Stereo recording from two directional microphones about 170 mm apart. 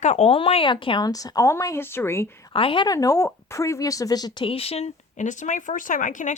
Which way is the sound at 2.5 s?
30° left (ahead or behind).